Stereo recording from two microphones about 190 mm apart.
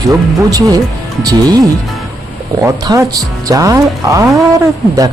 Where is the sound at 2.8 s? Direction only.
20° right (ahead or behind).